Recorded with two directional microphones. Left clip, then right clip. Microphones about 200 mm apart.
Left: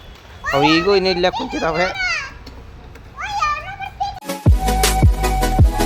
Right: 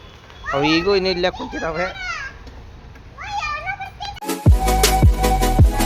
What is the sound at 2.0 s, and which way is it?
Children playing, 55° left (ahead or behind).